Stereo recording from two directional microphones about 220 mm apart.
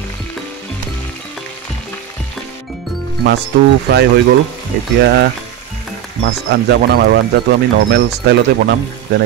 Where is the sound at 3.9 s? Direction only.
50° right (ahead or behind).